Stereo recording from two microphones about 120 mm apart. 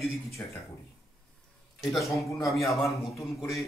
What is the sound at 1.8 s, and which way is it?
A man's voice, centre (ahead or behind).